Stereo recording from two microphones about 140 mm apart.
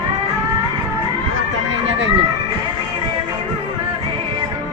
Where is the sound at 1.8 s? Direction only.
40° right (ahead or behind).